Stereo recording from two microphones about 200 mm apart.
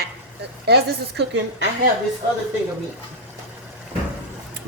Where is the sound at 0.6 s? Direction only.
55° right (ahead or behind).